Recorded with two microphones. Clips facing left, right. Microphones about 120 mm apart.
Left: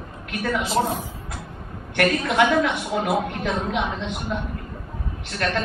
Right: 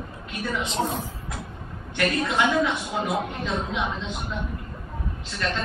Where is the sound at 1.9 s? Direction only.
60° left (ahead or behind).